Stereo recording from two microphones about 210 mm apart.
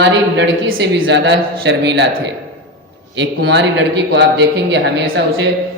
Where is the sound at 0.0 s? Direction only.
55° right (ahead or behind).